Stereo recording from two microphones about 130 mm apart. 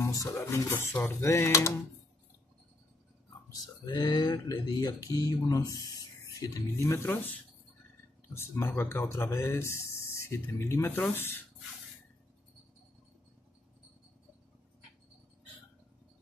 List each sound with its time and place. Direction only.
0.0 s speech: 25° left (ahead or behind)
3.4 s speech: 30° left (ahead or behind)
8.4 s speech: 20° left (ahead or behind)